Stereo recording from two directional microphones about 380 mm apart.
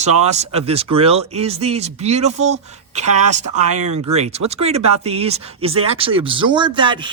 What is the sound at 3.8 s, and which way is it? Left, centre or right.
Speech, right.